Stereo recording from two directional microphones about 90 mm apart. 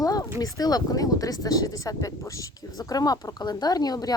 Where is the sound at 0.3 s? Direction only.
45° left (ahead or behind).